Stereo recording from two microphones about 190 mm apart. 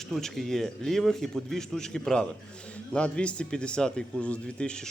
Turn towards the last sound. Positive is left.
turn(degrees=5)  # may be behind; listen again after turning